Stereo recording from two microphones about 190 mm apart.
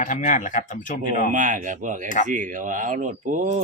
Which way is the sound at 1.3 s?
40° right (ahead or behind).